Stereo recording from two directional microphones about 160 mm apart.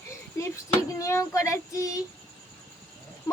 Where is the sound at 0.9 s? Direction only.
20° left (ahead or behind).